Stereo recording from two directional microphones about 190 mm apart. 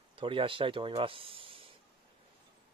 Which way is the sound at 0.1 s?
25° right (ahead or behind).